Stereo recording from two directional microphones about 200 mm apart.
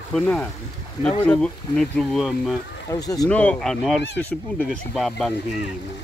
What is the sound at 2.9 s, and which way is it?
Speech, 20° left (ahead or behind).